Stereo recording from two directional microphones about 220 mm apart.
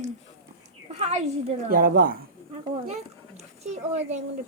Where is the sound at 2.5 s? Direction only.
30° right (ahead or behind).